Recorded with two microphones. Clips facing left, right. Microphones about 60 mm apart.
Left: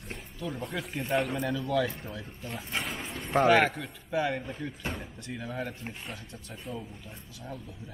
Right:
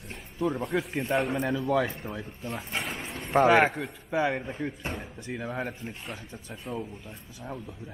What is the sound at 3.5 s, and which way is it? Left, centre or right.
Speech, centre.